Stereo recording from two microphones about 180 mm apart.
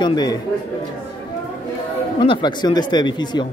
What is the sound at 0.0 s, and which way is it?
Speech, 25° left (ahead or behind).